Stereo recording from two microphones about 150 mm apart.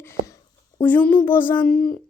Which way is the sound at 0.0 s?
15° left (ahead or behind).